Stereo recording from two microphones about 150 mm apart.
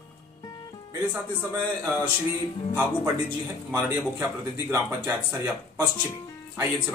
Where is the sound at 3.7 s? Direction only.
15° right (ahead or behind).